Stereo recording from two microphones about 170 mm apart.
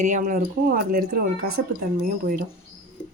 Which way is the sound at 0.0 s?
50° right (ahead or behind).